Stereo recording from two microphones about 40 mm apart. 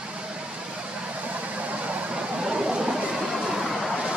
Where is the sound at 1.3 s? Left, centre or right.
Right; by 3.9 s centre.